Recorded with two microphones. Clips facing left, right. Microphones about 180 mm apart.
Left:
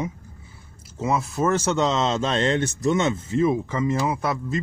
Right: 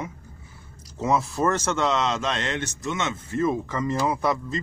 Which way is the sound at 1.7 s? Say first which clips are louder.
Left 2 dB; 20° left (ahead or behind).